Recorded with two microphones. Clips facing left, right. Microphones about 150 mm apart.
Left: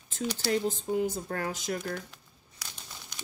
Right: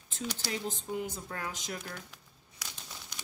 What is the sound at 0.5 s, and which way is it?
Speech, 35° left (ahead or behind).